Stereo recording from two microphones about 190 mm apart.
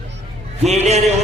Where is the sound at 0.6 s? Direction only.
35° right (ahead or behind).